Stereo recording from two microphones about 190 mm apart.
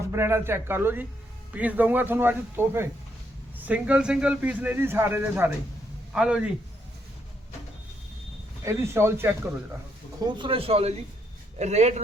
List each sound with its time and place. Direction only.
0.1 s a man's voice: 15° right (ahead or behind)
8.6 s a man's voice: 15° right (ahead or behind)
10.2 s a man's voice: 25° right (ahead or behind)